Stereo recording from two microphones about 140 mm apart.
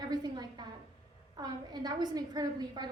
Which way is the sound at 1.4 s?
30° right (ahead or behind).